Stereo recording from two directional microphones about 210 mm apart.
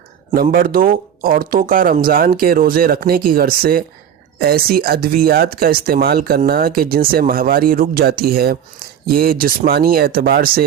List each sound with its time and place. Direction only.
0.5 s speech: 45° right (ahead or behind)